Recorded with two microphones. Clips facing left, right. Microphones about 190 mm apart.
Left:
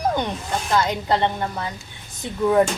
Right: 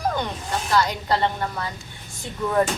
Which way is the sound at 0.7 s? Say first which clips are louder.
Left 1 dB; 20° left (ahead or behind).